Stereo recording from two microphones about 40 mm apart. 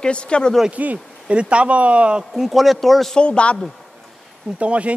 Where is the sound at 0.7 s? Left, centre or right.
Right.